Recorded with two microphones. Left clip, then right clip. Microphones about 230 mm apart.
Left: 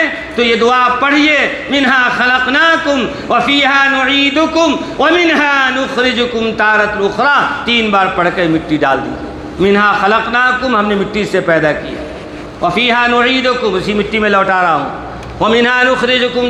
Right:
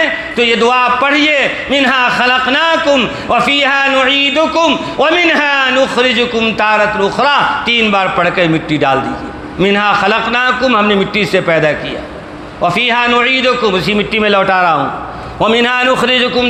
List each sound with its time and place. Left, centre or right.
0.0 s a man's voice: right